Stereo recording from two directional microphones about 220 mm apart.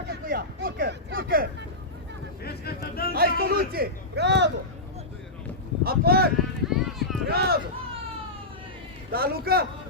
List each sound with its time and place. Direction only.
0.1 s speech: 40° right (ahead or behind)
2.4 s boat: 45° left (ahead or behind)
3.1 s a sound: 45° right (ahead or behind)
5.8 s speech: 45° right (ahead or behind)
6.7 s a sound: centre (ahead or behind)
7.3 s run: 45° right (ahead or behind)
9.1 s speech: 45° right (ahead or behind)